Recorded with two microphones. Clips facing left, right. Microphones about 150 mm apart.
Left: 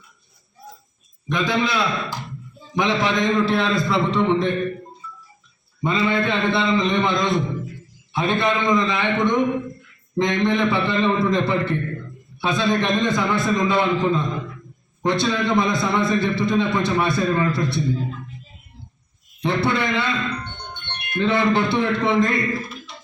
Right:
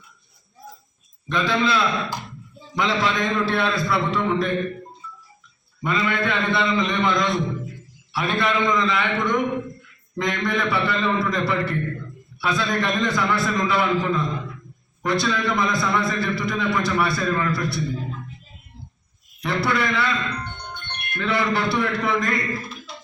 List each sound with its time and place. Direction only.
1.3 s a man's voice: 15° left (ahead or behind)
5.8 s a man's voice: 25° left (ahead or behind)
19.4 s a man's voice: 25° left (ahead or behind)